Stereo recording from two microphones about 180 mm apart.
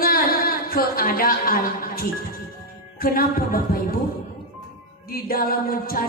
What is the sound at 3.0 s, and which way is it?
Speech, 55° left (ahead or behind).